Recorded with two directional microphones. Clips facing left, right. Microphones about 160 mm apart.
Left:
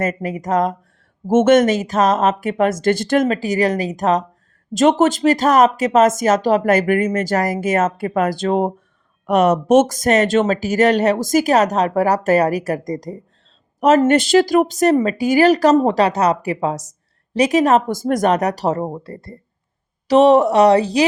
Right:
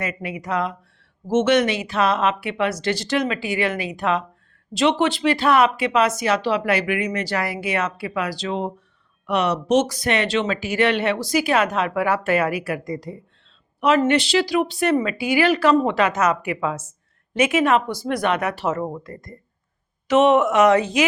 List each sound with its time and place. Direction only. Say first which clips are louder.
0.0 s speech: left 7 dB; 45° left (ahead or behind)